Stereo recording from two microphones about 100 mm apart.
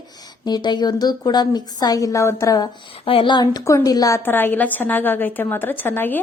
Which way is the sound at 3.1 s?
55° left (ahead or behind).